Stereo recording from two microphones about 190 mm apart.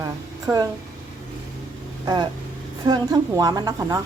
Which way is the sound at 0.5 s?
15° right (ahead or behind).